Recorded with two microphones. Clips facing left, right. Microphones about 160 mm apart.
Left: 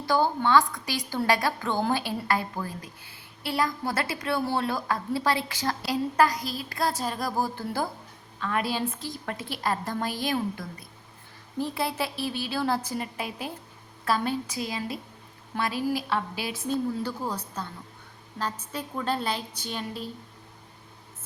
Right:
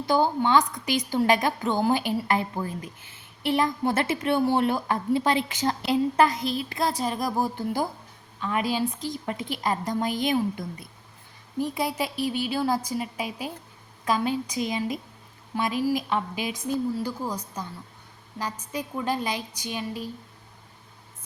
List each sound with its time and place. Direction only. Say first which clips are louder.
0.0 s a woman's voice: right 2 dB; 20° right (ahead or behind)